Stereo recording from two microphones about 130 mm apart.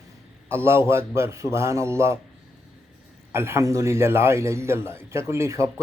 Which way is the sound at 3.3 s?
20° right (ahead or behind).